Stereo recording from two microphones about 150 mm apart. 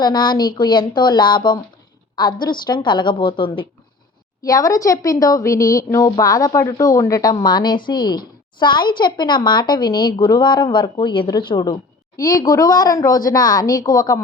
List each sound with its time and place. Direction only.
0.0 s a woman's voice: 30° left (ahead or behind)
4.4 s a woman's voice: 25° left (ahead or behind)